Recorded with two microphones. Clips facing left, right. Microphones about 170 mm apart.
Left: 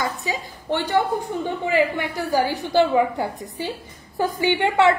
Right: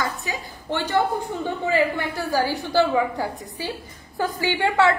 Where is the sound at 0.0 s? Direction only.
20° left (ahead or behind).